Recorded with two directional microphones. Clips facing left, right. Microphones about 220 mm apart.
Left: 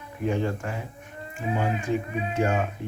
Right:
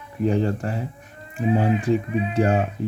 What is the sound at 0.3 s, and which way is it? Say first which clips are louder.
Speech: right 4 dB; 35° right (ahead or behind).